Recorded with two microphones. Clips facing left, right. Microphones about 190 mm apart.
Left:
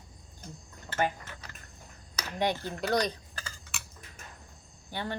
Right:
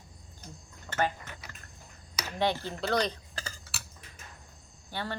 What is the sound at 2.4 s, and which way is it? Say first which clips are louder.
Speech: even; 15° left (ahead or behind).